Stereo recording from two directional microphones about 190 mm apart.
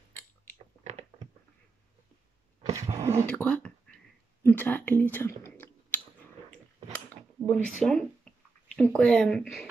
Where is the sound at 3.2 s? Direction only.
5° left (ahead or behind).